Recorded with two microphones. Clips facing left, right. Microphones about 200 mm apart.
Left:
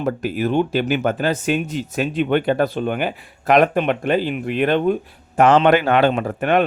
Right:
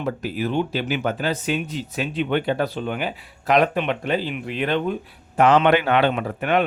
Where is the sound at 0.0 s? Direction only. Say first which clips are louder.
Left 4 dB; 50° left (ahead or behind).